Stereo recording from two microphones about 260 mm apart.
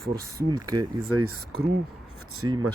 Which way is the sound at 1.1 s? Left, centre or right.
Right.